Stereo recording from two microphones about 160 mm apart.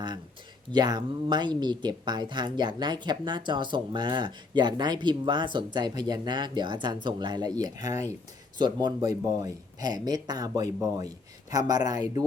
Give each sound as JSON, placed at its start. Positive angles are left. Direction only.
{"t": 0.7, "sound": "speech", "side_deg": -25}